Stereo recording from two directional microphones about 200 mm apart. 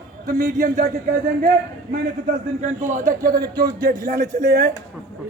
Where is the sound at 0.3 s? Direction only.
45° right (ahead or behind).